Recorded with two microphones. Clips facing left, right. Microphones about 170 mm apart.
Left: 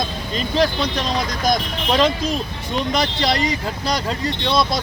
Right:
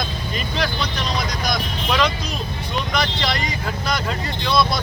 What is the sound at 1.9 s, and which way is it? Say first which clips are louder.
Speech: left 4 dB; 25° left (ahead or behind).